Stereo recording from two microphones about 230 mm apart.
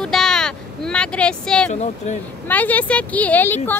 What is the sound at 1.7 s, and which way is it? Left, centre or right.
Speech, left.